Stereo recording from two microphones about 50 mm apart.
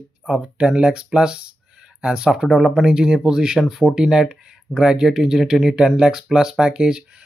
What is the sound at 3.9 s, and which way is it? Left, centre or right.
Speech, centre.